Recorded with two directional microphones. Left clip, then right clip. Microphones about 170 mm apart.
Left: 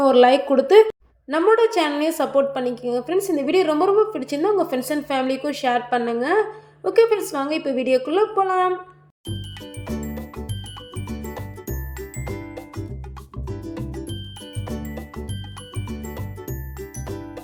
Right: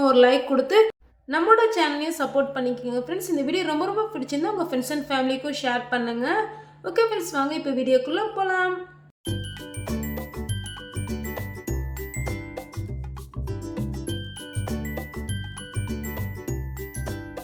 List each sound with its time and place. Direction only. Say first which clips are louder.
0.0 s a woman's voice: left 3 dB; 20° left (ahead or behind)
9.8 s music: left 1 dB; centre (ahead or behind)